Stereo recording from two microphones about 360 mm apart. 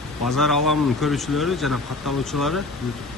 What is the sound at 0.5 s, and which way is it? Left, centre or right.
Speech, left.